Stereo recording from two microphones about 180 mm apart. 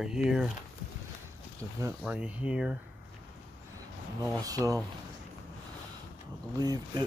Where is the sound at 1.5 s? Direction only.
15° right (ahead or behind).